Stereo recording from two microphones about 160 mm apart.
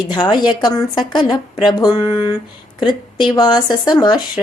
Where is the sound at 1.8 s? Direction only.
30° left (ahead or behind).